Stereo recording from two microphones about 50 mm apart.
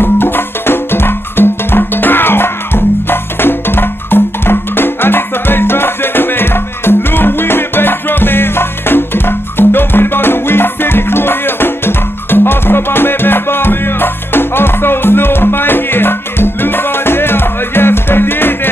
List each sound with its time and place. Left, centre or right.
0.0 s music: left